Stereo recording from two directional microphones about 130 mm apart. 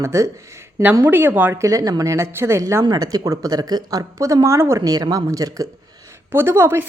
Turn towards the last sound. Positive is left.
turn(degrees=-15)  # may be behind; listen again after turning